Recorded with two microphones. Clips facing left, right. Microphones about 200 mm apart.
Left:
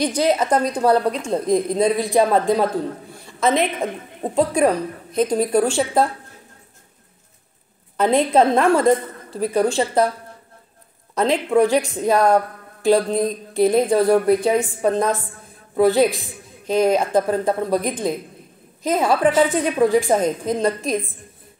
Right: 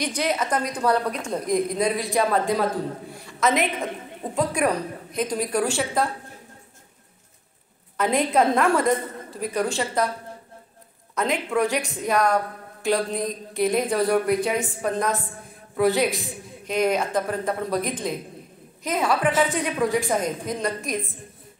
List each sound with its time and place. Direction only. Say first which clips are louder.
0.0 s a woman's voice: left 6 dB; 30° left (ahead or behind)
8.0 s a woman's voice: left 5 dB; 30° left (ahead or behind)
11.1 s a woman's voice: left 7 dB; 30° left (ahead or behind)
18.8 s a woman's voice: left 5 dB; 30° left (ahead or behind)